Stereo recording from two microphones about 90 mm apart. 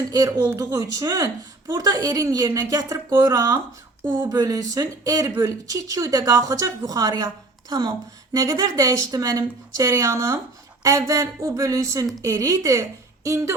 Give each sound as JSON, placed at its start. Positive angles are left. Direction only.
{"t": 0.1, "sound": "speech", "side_deg": -45}
{"t": 4.0, "sound": "a sound", "side_deg": -30}
{"t": 4.4, "sound": "speech", "side_deg": -40}